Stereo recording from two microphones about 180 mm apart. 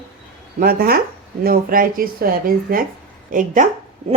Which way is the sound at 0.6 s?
55° right (ahead or behind).